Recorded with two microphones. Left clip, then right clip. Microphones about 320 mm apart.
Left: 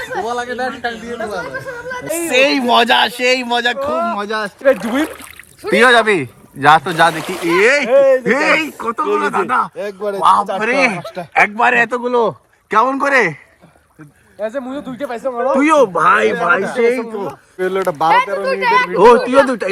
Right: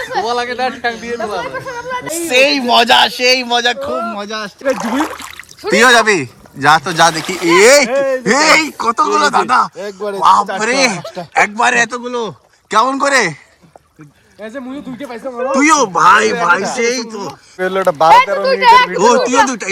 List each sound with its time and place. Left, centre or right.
0.2 s speech: centre
2.0 s a woman's voice: centre
4.8 s a sound: centre
5.7 s speech: centre
7.9 s speech: centre
8.2 s speech: centre
14.4 s speech: centre
17.6 s speech: right
19.0 s speech: centre